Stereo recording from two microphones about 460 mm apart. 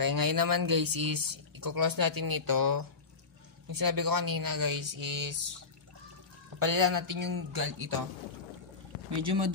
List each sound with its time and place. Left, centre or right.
0.0 s speech: right
6.6 s speech: right